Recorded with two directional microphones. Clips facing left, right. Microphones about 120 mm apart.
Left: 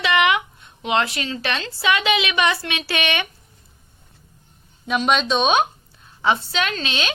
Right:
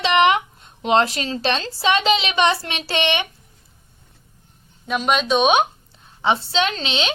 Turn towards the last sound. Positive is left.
turn(degrees=-25)  # may be behind; listen again after turning